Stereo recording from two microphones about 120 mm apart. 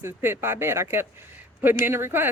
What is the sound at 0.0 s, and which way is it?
Speech, 20° right (ahead or behind).